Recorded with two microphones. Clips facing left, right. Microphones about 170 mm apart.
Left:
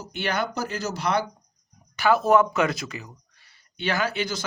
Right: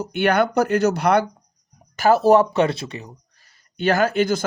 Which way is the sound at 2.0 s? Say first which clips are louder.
Right 5 dB; 40° right (ahead or behind).